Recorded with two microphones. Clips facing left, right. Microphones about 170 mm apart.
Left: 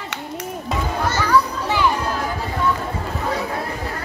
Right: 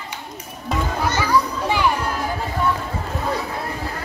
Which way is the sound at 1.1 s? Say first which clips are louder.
Left 2 dB; 15° right (ahead or behind).